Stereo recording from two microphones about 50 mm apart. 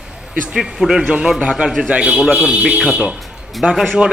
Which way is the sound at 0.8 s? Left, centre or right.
Centre.